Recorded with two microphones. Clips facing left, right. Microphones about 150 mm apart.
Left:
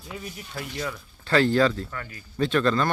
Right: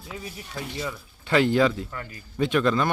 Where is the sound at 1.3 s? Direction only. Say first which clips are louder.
Even; 15° right (ahead or behind).